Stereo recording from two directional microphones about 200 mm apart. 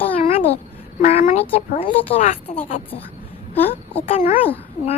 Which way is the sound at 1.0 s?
35° left (ahead or behind).